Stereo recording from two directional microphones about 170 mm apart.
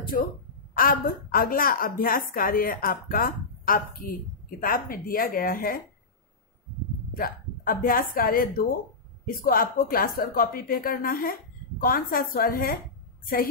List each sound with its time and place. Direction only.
0.1 s a woman's voice: 50° left (ahead or behind)
7.2 s a woman's voice: 55° left (ahead or behind)